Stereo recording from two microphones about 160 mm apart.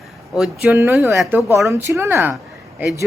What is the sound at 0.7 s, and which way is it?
Speech, 15° right (ahead or behind).